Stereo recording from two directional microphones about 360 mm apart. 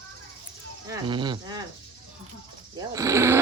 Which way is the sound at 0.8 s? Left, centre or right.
Centre.